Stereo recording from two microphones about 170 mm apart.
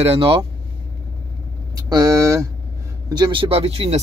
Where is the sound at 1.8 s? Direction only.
20° right (ahead or behind).